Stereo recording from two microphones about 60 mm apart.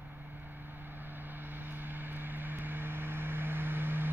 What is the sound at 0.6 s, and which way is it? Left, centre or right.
Vehicle, right.